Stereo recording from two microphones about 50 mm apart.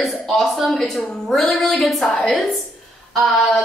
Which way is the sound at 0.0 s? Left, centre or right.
Centre.